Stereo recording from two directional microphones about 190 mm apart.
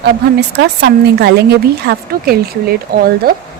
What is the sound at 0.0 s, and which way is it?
A woman's voice, 60° right (ahead or behind).